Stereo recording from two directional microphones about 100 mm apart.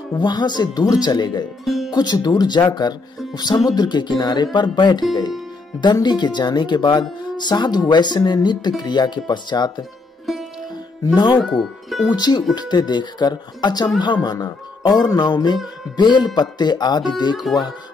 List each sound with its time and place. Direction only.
0.2 s speech: 45° left (ahead or behind)
1.6 s speech: centre (ahead or behind)
1.9 s speech: 45° left (ahead or behind)
6.0 s speech: 45° left (ahead or behind)
10.3 s music: centre (ahead or behind)
11.4 s speech: 5° left (ahead or behind)
12.1 s speech: 45° left (ahead or behind)
17.4 s speech: centre (ahead or behind)